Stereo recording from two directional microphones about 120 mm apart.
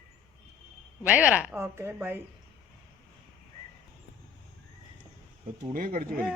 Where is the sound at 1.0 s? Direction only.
10° right (ahead or behind).